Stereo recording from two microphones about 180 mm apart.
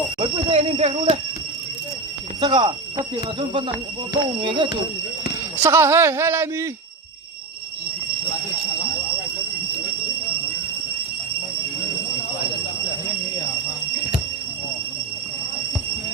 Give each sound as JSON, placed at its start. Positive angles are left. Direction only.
{"t": 0.2, "sound": "speech", "side_deg": -30}
{"t": 2.4, "sound": "speech", "side_deg": -25}
{"t": 5.6, "sound": "speech", "side_deg": -15}